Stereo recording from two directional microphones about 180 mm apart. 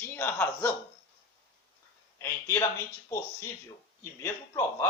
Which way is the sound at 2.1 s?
15° left (ahead or behind).